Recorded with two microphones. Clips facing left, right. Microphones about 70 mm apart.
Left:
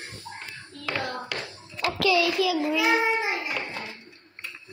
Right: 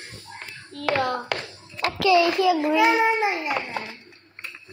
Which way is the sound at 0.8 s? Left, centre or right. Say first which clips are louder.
Right 9 dB; right.